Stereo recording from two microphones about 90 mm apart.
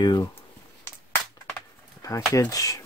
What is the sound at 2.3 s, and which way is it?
Speech, 40° left (ahead or behind).